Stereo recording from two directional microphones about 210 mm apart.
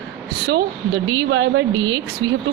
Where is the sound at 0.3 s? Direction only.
50° right (ahead or behind).